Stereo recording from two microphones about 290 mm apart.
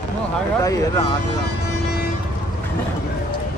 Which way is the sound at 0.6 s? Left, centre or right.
Centre.